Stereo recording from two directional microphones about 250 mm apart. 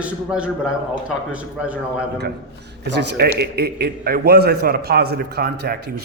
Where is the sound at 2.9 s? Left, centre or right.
Right.